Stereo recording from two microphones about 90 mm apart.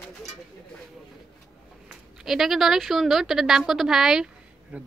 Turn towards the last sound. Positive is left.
turn(degrees=-5)  # may be behind; listen again after turning